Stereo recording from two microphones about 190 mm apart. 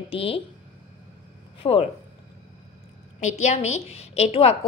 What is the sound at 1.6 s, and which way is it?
Speech, 30° left (ahead or behind).